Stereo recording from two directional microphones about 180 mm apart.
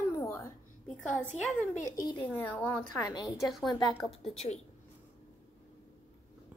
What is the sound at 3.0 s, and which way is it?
Speech, 20° left (ahead or behind).